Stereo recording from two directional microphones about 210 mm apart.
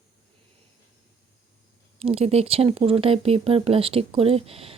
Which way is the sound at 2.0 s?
30° right (ahead or behind).